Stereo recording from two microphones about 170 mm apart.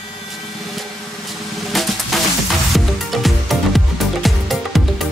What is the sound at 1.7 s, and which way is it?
Music, centre (ahead or behind).